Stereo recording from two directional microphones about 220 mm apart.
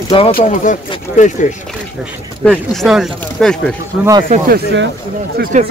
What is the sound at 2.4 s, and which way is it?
Speech, 5° left (ahead or behind).